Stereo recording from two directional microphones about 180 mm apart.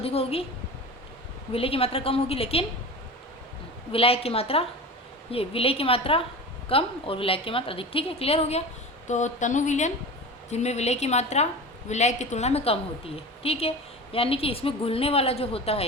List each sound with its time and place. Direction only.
0.0 s a woman's voice: 35° left (ahead or behind)
1.5 s a woman's voice: 30° left (ahead or behind)
3.9 s a woman's voice: 35° left (ahead or behind)